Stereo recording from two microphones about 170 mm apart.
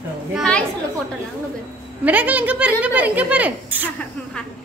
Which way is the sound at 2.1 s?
10° right (ahead or behind).